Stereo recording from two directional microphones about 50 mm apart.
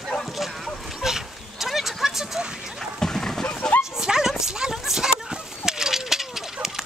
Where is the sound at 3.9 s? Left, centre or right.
Centre.